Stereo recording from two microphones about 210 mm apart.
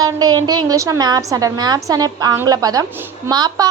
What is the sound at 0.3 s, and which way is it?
A woman's voice, 20° right (ahead or behind).